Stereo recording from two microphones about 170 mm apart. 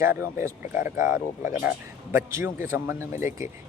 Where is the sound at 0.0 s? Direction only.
15° right (ahead or behind).